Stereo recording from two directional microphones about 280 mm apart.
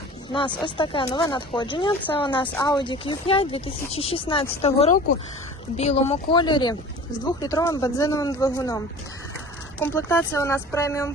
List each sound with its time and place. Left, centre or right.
0.3 s speech: centre
9.8 s speech: centre